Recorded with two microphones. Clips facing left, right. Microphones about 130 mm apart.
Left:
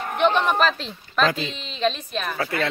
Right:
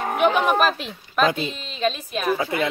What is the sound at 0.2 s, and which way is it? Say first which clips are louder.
Speech: right 1 dB; 10° right (ahead or behind).